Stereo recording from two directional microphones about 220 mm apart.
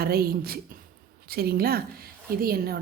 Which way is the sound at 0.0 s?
45° right (ahead or behind).